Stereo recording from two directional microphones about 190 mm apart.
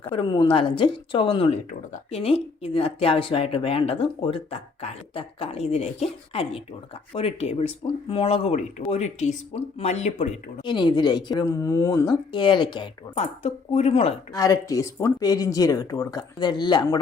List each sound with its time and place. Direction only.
0.1 s speech: 25° left (ahead or behind)
10.6 s speech: 25° left (ahead or behind)
14.3 s speech: 15° left (ahead or behind)